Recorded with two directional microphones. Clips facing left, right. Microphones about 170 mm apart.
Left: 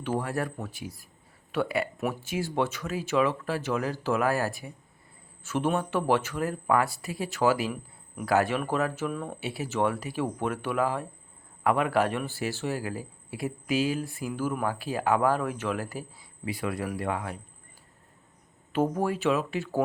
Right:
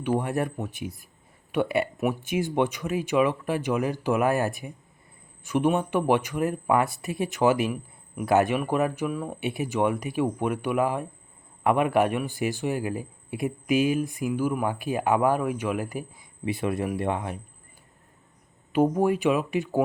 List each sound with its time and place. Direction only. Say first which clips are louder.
0.0 s a man's voice: right 4 dB; 15° right (ahead or behind)
18.7 s a man's voice: right 5 dB; 15° right (ahead or behind)